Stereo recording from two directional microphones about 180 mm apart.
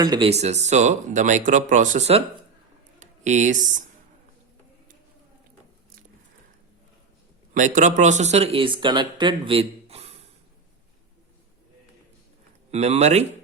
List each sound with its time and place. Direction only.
0.0 s speech: 20° right (ahead or behind)
0.3 s speech: 35° right (ahead or behind)
7.5 s speech: 45° right (ahead or behind)
12.7 s speech: 35° right (ahead or behind)